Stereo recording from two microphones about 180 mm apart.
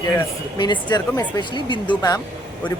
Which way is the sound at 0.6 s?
25° left (ahead or behind).